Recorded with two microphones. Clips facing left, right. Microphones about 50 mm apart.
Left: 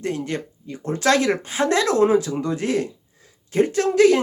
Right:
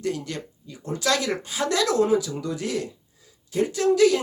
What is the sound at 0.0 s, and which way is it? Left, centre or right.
Speech, left.